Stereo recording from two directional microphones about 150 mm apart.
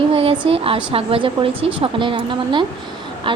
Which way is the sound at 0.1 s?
40° right (ahead or behind).